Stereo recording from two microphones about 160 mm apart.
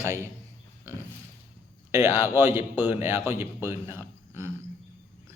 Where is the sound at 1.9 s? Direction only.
15° right (ahead or behind).